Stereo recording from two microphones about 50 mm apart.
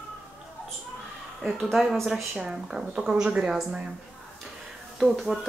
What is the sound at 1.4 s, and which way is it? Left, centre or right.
Speech, centre.